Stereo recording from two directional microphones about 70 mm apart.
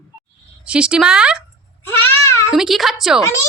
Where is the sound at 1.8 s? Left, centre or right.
Left.